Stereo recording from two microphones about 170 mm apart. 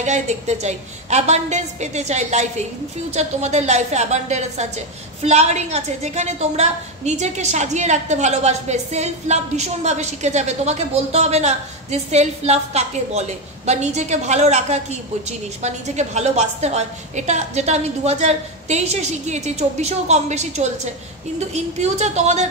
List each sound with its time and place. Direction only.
0.0 s a woman's voice: 40° right (ahead or behind)